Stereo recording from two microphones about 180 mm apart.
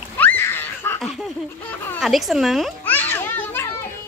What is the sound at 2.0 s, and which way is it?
Speech, centre (ahead or behind).